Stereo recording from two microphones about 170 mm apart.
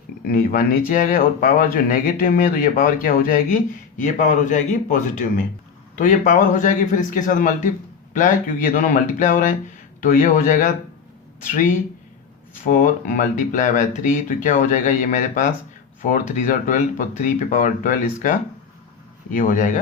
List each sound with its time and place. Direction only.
0.3 s speech: 55° left (ahead or behind)